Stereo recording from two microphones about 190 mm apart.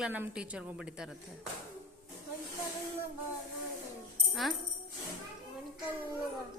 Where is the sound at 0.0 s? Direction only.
5° right (ahead or behind).